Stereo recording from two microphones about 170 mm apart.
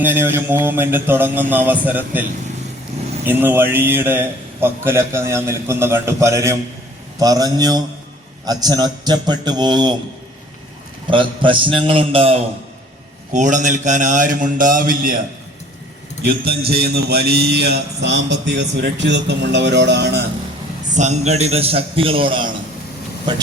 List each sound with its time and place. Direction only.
0.0 s a man's voice: 10° right (ahead or behind)
3.2 s a man's voice: 10° right (ahead or behind)
11.1 s a man's voice: 30° right (ahead or behind)
13.3 s a man's voice: 45° right (ahead or behind)
16.5 s a man's voice: 65° right (ahead or behind); by 20.2 s 80° right
20.9 s a man's voice: 45° right (ahead or behind)